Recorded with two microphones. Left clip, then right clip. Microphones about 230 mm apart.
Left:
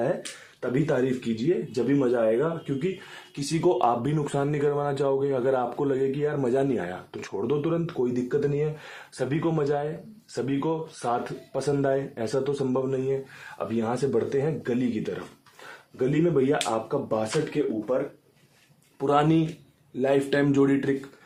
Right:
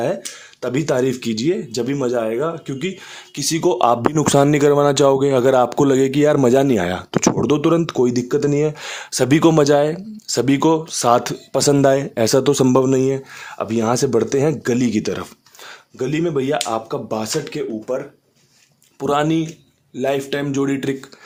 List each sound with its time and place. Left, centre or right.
0.6 s speech: right
16.0 s speech: right
18.9 s speech: right